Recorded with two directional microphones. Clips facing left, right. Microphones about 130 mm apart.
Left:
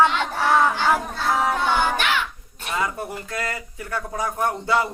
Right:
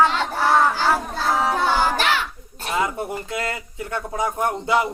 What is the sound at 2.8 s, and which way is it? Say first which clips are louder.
Speech: right 3 dB; 20° right (ahead or behind).